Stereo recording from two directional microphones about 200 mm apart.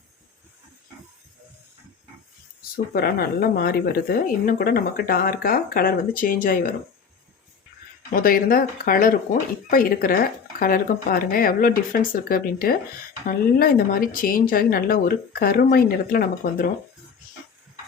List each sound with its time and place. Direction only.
2.7 s speech: 50° left (ahead or behind)
8.1 s speech: 45° left (ahead or behind)